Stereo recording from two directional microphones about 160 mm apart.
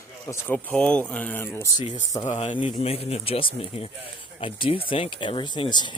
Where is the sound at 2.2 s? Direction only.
50° left (ahead or behind).